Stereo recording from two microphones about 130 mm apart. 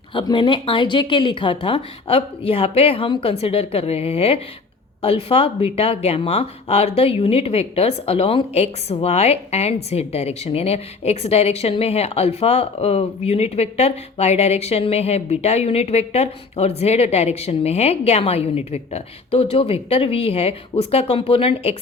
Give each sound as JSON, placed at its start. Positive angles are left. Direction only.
{"t": 0.1, "sound": "speech", "side_deg": 40}